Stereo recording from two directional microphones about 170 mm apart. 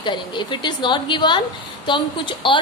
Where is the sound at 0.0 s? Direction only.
25° left (ahead or behind).